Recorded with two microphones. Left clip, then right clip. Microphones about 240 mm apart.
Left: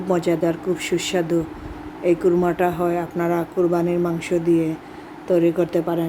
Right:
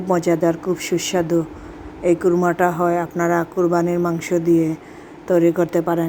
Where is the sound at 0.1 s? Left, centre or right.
Centre.